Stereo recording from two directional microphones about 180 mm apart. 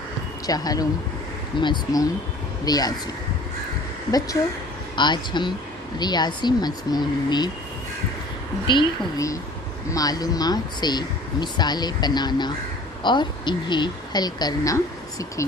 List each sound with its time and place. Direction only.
0.4 s speech: 20° left (ahead or behind)
4.9 s speech: 25° left (ahead or behind)
8.6 s speech: 25° left (ahead or behind)